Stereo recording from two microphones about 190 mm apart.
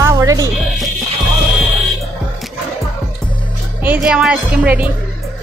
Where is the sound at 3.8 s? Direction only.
5° right (ahead or behind).